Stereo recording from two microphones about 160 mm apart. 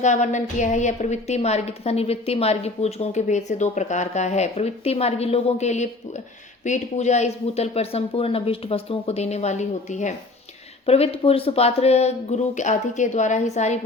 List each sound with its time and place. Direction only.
0.0 s a woman's voice: 50° left (ahead or behind)